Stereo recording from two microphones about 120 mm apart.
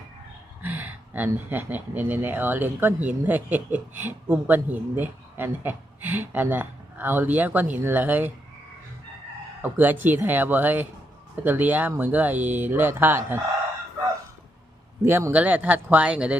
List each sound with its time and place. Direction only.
0.6 s speech: 15° right (ahead or behind)
9.6 s speech: 15° right (ahead or behind)
15.0 s speech: 20° right (ahead or behind)